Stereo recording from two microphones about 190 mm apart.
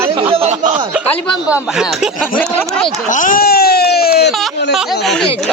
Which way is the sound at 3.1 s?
45° left (ahead or behind).